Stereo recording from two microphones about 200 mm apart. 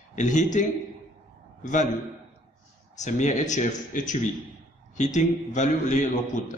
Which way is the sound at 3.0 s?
35° left (ahead or behind).